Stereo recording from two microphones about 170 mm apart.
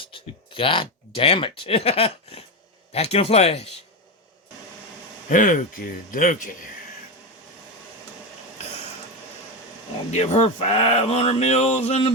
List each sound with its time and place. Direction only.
0.0 s speech: 30° left (ahead or behind)
5.3 s speech: 50° left (ahead or behind)
10.1 s speech: 40° left (ahead or behind)